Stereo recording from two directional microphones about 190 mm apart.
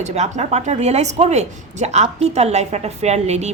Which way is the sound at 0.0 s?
35° right (ahead or behind).